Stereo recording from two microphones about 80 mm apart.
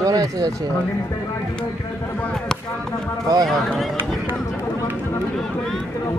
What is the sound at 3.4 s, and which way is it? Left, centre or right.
Speech, centre.